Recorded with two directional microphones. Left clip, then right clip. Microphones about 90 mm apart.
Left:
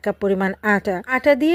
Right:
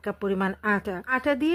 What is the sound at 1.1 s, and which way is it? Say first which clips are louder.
Speech: left 9 dB; 25° left (ahead or behind).